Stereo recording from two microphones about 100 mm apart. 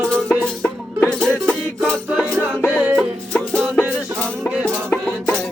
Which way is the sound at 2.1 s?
10° right (ahead or behind).